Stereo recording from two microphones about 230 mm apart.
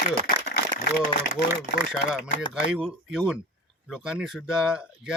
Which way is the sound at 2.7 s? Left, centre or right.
Centre.